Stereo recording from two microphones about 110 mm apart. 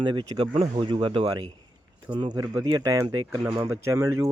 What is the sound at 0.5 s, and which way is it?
Speech, 65° right (ahead or behind).